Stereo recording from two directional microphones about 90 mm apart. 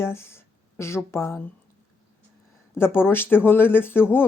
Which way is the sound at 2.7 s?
25° left (ahead or behind).